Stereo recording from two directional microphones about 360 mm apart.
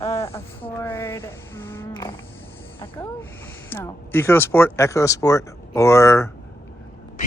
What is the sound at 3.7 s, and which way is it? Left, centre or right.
Speech, centre.